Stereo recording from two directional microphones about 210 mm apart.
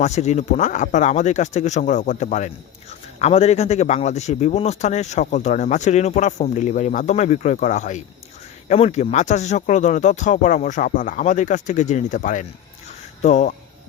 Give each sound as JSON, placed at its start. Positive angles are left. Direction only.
{"t": 0.0, "sound": "a man's voice", "side_deg": 35}